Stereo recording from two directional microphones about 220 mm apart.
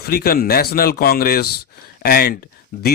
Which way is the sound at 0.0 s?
45° left (ahead or behind).